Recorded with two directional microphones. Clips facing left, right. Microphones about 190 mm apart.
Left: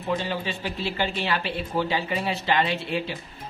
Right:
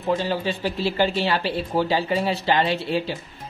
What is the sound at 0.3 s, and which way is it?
Speech, 35° right (ahead or behind).